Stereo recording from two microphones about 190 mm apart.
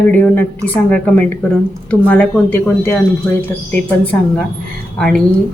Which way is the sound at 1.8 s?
10° left (ahead or behind).